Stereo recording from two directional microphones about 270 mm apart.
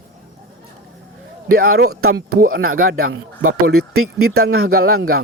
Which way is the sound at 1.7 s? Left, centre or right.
Right.